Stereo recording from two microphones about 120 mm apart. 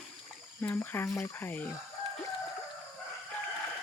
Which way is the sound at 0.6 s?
20° left (ahead or behind).